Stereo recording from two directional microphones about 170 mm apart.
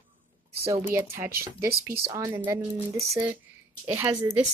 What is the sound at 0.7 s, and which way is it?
Speech, 15° right (ahead or behind).